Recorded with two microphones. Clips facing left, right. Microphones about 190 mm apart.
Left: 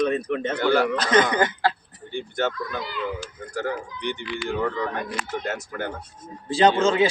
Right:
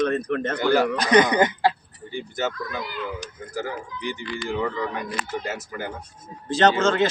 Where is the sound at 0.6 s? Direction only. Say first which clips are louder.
Even; 10° right (ahead or behind).